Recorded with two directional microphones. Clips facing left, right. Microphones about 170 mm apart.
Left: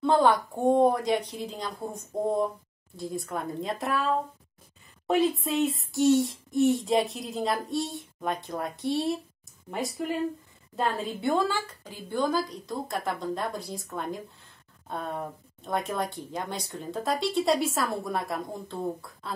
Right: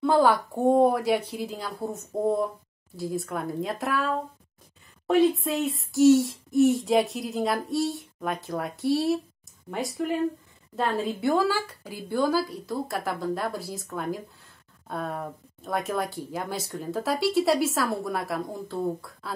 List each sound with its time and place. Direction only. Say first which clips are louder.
0.0 s speech: right 1 dB; 5° right (ahead or behind)